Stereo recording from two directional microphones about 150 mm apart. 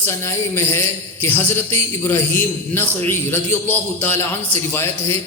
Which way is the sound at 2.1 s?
15° left (ahead or behind).